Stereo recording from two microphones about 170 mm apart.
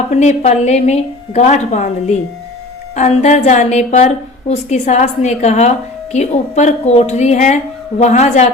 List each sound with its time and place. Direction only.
0.1 s a woman's voice: 40° left (ahead or behind)